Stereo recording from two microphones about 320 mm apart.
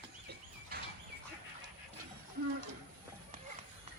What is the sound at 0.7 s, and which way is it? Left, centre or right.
Bird, right.